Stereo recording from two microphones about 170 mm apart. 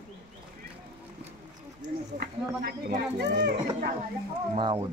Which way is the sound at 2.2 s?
65° right (ahead or behind).